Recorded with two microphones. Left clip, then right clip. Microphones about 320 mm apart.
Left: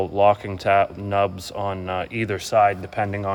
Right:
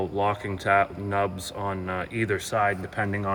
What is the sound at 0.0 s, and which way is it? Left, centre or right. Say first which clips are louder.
Speech: left 8 dB; left.